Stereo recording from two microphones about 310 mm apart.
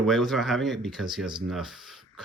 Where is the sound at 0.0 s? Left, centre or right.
Centre.